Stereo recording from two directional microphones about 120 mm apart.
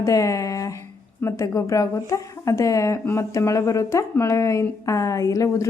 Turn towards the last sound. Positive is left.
turn(degrees=25)  # may be behind; listen again after turning